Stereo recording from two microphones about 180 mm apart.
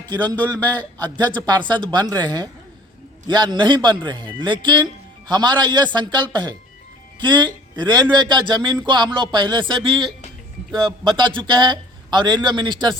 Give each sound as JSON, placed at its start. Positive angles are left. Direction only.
{"t": 0.2, "sound": "a man's voice", "side_deg": 10}
{"t": 1.9, "sound": "a man's voice", "side_deg": -25}